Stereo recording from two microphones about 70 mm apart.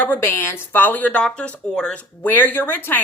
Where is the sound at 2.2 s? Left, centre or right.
Left.